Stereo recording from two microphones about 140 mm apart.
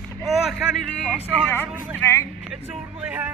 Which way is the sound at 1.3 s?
15° left (ahead or behind).